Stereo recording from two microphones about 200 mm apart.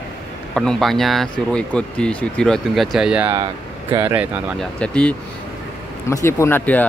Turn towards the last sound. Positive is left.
turn(degrees=10)  # may be behind; listen again after turning